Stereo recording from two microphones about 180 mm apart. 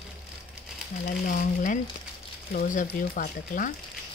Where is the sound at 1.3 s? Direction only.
50° left (ahead or behind).